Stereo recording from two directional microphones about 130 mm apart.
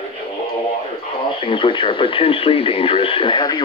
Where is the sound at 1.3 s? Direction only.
40° left (ahead or behind).